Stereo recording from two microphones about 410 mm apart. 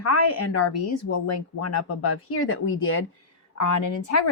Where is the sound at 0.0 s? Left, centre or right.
Left.